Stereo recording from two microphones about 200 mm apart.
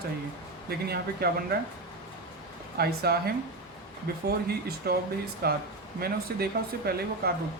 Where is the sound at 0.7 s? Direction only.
50° right (ahead or behind).